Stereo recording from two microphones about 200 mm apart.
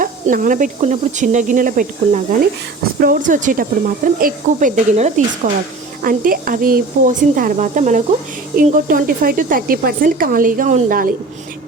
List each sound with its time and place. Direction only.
0.0 s speech: 40° right (ahead or behind)